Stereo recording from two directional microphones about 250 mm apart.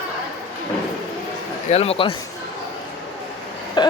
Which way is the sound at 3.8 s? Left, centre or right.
Centre.